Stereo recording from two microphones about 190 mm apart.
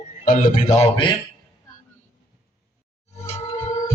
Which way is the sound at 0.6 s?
15° left (ahead or behind).